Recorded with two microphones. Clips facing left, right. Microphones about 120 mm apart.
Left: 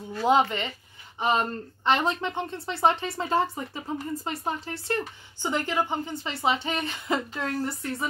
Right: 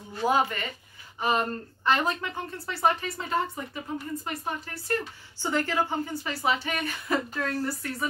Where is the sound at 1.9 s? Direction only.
25° left (ahead or behind).